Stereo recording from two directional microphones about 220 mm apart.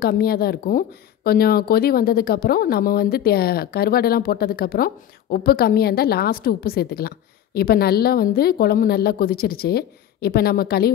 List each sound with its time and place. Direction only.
0.0 s speech: 45° left (ahead or behind)